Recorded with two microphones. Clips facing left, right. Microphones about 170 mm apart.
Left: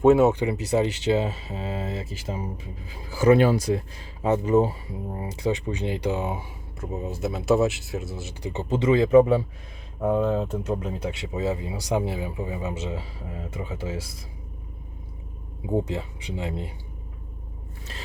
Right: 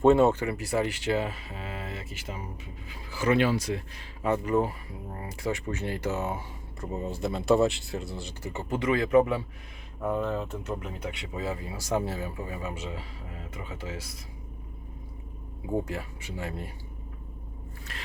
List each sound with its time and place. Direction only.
0.0 s speech: 5° left (ahead or behind)
0.3 s speech: 20° left (ahead or behind); by 3.8 s 40° left (ahead or behind)
4.2 s speech: 25° left (ahead or behind)
6.7 s speech: centre (ahead or behind)
8.4 s speech: 20° left (ahead or behind)
15.6 s speech: 20° left (ahead or behind)
17.9 s speech: 30° left (ahead or behind)